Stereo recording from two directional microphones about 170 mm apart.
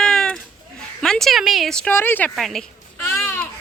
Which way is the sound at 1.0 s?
5° left (ahead or behind).